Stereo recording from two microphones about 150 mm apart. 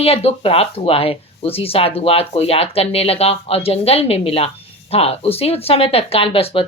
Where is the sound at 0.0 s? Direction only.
40° left (ahead or behind).